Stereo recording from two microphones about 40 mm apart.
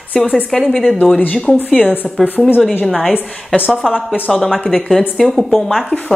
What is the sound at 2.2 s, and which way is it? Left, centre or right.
Speech, left.